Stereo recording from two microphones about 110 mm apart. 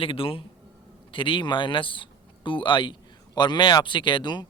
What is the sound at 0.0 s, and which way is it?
Speech, 55° left (ahead or behind).